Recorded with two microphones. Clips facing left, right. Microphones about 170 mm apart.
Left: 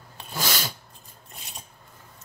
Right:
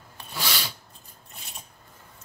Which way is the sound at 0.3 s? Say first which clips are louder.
Left 3 dB; 45° left (ahead or behind).